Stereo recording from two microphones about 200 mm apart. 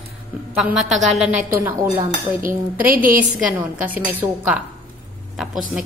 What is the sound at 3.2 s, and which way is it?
A woman's voice, 5° right (ahead or behind).